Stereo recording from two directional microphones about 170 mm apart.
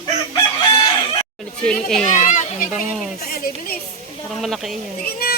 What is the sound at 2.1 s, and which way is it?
Speech, 50° left (ahead or behind).